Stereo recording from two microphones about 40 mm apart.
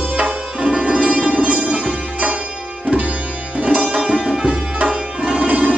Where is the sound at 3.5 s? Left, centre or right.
Right.